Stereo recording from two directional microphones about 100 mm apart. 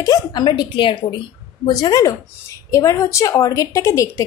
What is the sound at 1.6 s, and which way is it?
A woman's voice, 40° left (ahead or behind).